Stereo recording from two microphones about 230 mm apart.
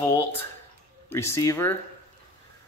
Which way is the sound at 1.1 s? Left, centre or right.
Centre.